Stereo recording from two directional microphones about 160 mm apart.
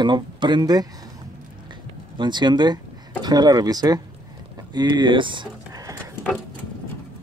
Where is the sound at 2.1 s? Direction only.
30° right (ahead or behind).